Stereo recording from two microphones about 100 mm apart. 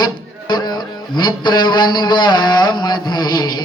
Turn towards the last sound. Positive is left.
turn(degrees=45)  # may be behind; listen again after turning